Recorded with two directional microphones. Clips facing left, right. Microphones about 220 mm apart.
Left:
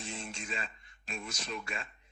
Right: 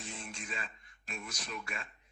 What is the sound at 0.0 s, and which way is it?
A man's voice, 25° left (ahead or behind).